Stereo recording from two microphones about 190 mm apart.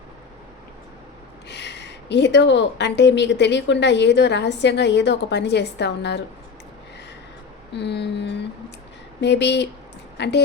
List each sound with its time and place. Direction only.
1.5 s a woman's voice: 65° left (ahead or behind)
7.7 s a woman's voice: 65° left (ahead or behind)